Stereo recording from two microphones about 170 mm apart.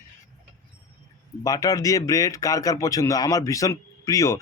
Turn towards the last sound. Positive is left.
turn(degrees=20)  # may be behind; listen again after turning